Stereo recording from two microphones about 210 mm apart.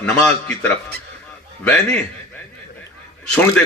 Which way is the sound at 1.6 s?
5° left (ahead or behind).